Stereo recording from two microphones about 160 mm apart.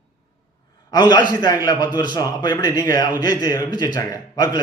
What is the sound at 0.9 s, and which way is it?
A man's voice, 25° left (ahead or behind).